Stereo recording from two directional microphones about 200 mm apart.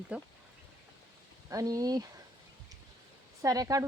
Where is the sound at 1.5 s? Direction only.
20° right (ahead or behind).